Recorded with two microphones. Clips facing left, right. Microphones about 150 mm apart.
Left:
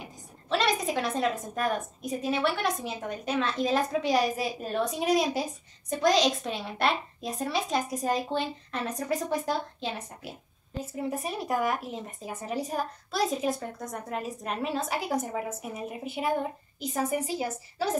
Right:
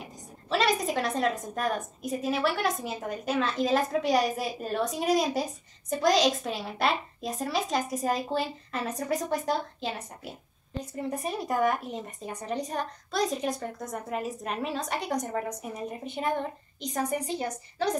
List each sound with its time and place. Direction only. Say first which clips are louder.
0.0 s a woman's voice: right 1 dB; centre (ahead or behind)